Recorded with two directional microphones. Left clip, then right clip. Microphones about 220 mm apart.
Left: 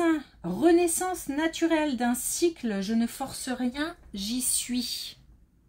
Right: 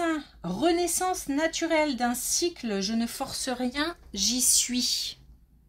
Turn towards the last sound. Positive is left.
turn(degrees=-25)  # may be behind; listen again after turning